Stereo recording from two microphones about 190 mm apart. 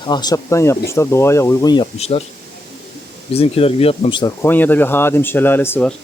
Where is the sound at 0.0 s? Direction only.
20° left (ahead or behind).